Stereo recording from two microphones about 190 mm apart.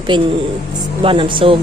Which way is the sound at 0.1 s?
30° right (ahead or behind).